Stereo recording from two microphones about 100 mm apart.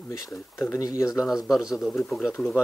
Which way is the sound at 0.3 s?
30° left (ahead or behind).